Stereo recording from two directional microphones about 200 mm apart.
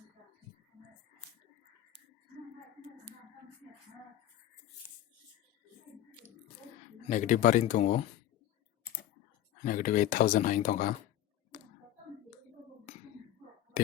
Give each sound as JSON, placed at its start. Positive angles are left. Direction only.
{"t": 7.1, "sound": "speech", "side_deg": 40}
{"t": 9.6, "sound": "speech", "side_deg": 40}